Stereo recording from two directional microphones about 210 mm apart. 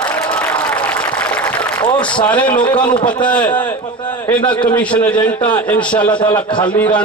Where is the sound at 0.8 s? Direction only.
5° left (ahead or behind).